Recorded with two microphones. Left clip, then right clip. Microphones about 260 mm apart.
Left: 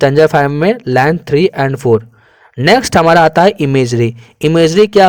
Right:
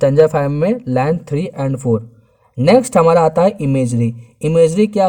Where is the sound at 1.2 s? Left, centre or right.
Left.